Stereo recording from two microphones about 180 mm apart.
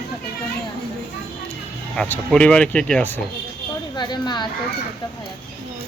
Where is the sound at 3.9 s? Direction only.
25° left (ahead or behind).